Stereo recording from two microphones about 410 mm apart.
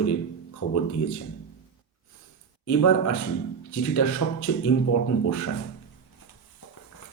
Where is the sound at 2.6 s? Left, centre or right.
Left.